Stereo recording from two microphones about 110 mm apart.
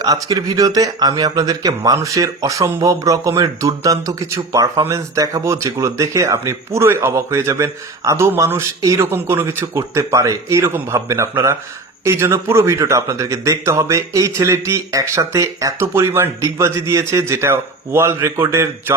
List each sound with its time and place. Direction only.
0.0 s speech: 35° right (ahead or behind)